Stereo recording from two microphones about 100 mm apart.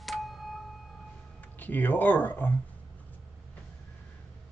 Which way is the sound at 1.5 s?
20° left (ahead or behind).